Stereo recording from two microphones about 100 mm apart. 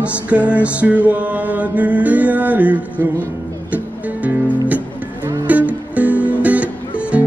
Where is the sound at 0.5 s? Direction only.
15° right (ahead or behind).